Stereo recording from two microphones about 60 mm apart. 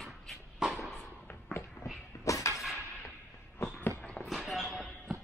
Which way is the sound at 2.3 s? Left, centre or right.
Left.